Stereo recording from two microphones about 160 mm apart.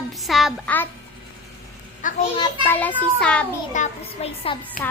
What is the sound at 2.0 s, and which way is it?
Speech, 55° left (ahead or behind).